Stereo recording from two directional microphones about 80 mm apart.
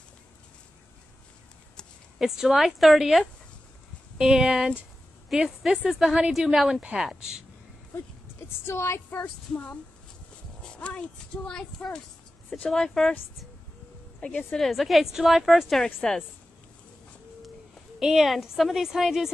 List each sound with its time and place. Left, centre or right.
2.1 s speech: centre
8.4 s a woman's voice: left
9.5 s speech: centre
14.2 s speech: centre
17.9 s speech: centre